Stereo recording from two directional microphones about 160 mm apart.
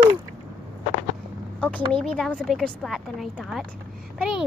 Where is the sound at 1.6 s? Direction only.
5° left (ahead or behind).